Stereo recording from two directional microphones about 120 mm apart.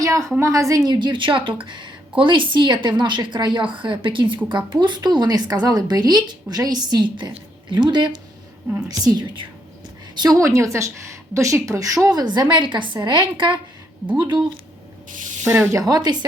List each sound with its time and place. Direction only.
0.0 s a woman's voice: 25° right (ahead or behind)
0.9 s a woman's voice: 40° right (ahead or behind)
10.2 s a woman's voice: 25° right (ahead or behind)
15.4 s speech: 10° right (ahead or behind)
15.7 s a woman's voice: 30° right (ahead or behind)